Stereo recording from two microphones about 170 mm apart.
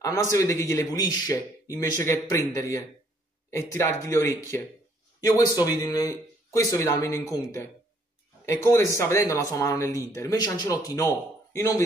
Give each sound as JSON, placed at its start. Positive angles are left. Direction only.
{"t": 0.0, "sound": "a man's voice", "side_deg": 20}